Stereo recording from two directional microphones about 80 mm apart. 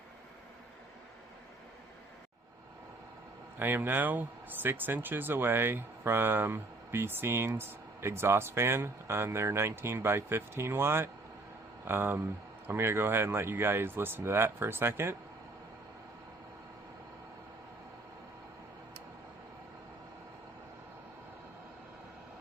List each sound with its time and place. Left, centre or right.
3.6 s speech: right